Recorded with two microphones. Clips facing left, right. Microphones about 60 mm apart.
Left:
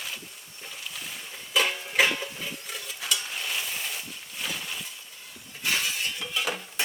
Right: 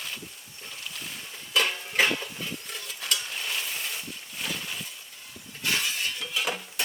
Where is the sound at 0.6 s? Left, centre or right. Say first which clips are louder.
Even; centre.